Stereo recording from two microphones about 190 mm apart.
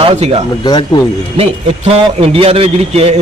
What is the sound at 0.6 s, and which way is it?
Speech, 25° left (ahead or behind).